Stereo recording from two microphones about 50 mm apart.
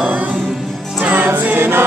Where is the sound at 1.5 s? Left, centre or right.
Right.